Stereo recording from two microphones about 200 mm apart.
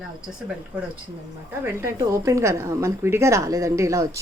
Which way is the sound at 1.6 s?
15° right (ahead or behind).